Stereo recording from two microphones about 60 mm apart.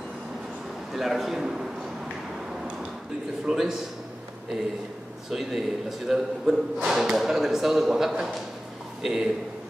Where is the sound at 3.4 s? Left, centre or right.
Centre.